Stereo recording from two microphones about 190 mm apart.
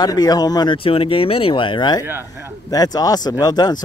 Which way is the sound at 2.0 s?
15° right (ahead or behind).